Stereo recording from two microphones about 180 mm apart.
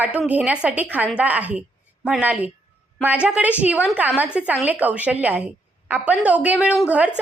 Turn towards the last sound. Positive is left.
turn(degrees=-10)  # may be behind; listen again after turning